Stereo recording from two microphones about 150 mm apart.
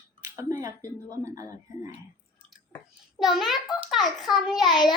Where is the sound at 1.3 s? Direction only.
20° right (ahead or behind).